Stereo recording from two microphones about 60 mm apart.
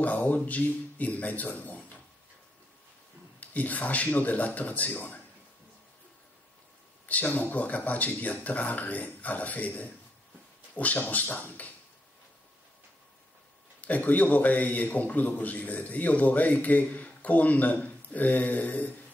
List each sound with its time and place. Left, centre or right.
0.0 s a man's voice: left
3.3 s a man's voice: left
7.1 s a man's voice: left
13.7 s a man's voice: left